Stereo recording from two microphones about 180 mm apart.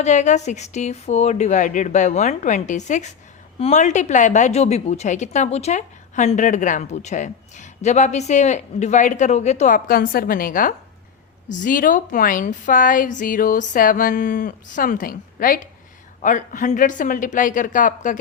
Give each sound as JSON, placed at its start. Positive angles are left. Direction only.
{"t": 0.0, "sound": "a woman's voice", "side_deg": 40}